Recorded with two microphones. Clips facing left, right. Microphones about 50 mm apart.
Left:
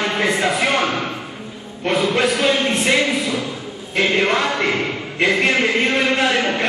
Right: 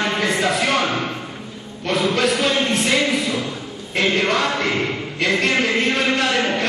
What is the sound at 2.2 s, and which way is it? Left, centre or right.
A man's voice, centre.